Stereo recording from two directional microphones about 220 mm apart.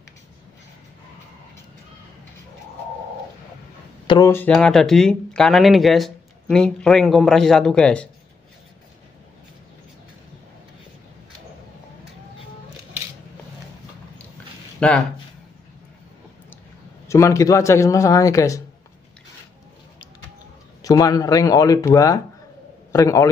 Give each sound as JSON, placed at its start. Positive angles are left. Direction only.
{"t": 4.1, "sound": "speech", "side_deg": 15}
{"t": 14.8, "sound": "speech", "side_deg": 5}
{"t": 17.1, "sound": "speech", "side_deg": 15}
{"t": 20.8, "sound": "speech", "side_deg": 15}